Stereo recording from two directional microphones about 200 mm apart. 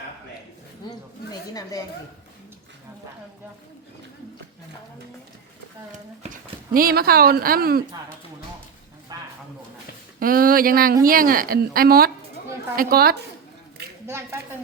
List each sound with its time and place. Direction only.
1.3 s speech: 20° left (ahead or behind)
6.3 s speech: 45° right (ahead or behind)
9.1 s a sound: 20° right (ahead or behind)
10.2 s speech: 45° right (ahead or behind)
14.1 s a woman's voice: 15° right (ahead or behind)